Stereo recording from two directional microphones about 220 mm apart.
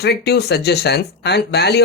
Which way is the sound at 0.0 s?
45° left (ahead or behind).